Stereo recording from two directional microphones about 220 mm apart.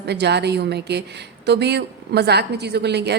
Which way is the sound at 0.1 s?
50° right (ahead or behind).